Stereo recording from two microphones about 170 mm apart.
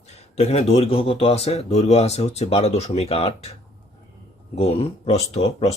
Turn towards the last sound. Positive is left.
turn(degrees=35)  # may be behind; listen again after turning